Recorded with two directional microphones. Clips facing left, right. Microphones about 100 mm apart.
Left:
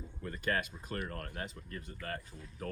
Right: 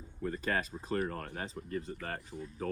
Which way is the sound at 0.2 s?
30° right (ahead or behind).